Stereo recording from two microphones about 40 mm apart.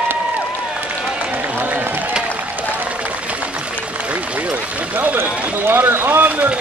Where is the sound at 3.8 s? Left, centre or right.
Right.